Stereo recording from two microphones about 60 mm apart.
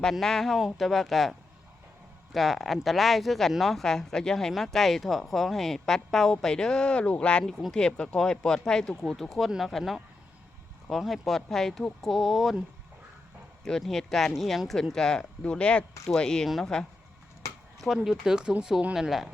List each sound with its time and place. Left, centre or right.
0.0 s speech: centre
7.4 s speech: centre
13.7 s speech: centre
17.4 s a sound: left
17.7 s speech: centre